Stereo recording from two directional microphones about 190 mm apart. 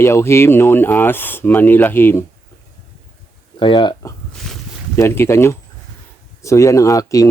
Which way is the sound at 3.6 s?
25° left (ahead or behind).